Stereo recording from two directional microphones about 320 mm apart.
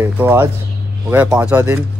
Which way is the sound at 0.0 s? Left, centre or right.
Centre.